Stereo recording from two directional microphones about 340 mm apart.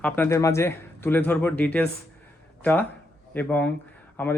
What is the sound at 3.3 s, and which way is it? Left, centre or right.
Speech, centre.